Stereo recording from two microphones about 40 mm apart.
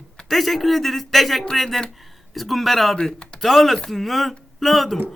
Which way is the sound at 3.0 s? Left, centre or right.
Centre.